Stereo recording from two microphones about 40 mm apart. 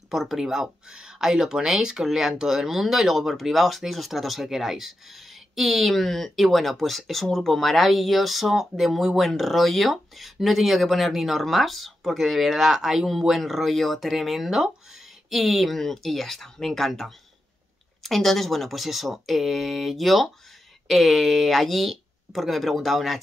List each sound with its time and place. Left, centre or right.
0.1 s speech: centre